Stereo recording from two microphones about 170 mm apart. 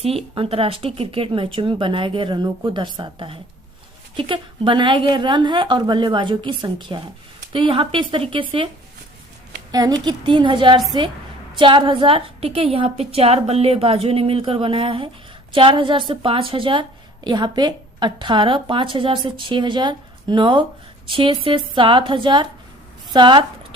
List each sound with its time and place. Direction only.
0.3 s a woman's voice: 35° right (ahead or behind)
9.7 s a woman's voice: 25° right (ahead or behind)